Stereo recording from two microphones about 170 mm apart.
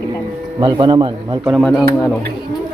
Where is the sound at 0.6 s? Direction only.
25° right (ahead or behind).